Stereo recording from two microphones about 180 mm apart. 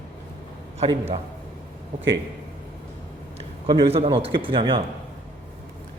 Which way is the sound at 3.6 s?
25° right (ahead or behind).